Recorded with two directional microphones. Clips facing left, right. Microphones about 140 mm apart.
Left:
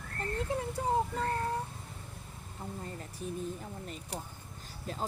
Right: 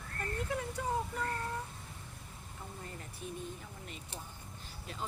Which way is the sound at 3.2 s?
40° left (ahead or behind).